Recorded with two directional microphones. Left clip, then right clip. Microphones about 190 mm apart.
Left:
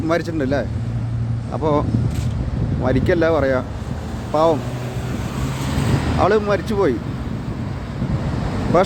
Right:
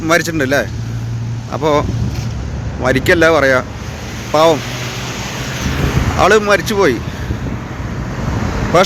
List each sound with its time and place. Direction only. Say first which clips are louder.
0.1 s speech: right 8 dB; centre (ahead or behind)
2.8 s speech: right 7 dB; 5° right (ahead or behind)
5.2 s vehicle: right 5 dB; 65° left (ahead or behind)
6.1 s speech: right 7 dB; 5° right (ahead or behind)